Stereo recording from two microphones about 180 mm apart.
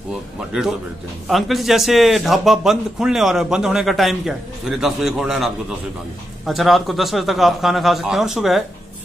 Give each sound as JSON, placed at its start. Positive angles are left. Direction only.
{"t": 0.1, "sound": "a man's voice", "side_deg": -5}